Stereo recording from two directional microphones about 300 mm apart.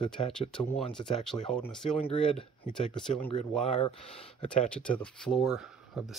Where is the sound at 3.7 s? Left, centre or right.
Centre.